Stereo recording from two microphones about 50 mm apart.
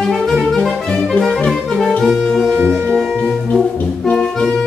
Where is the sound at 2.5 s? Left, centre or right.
Right.